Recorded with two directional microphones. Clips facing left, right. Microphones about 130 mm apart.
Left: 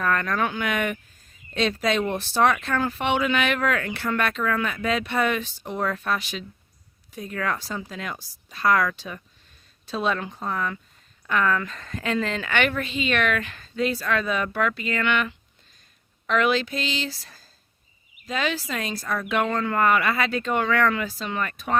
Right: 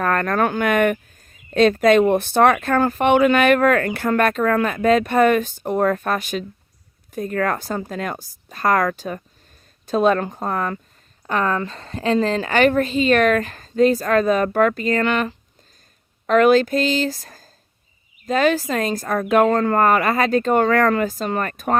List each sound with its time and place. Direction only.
0.0 s speech: 50° right (ahead or behind)
11.3 s a woman's voice: 35° right (ahead or behind)